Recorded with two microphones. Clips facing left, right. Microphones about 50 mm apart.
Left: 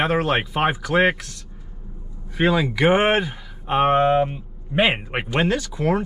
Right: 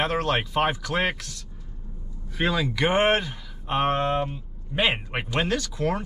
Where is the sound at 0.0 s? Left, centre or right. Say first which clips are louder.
Left 4 dB; centre.